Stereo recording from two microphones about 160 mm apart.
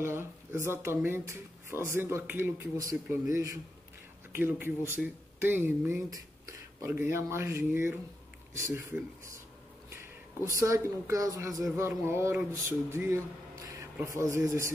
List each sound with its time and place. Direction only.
0.0 s speech: 15° right (ahead or behind)
4.4 s speech: 15° right (ahead or behind)
10.5 s a man's voice: 20° right (ahead or behind)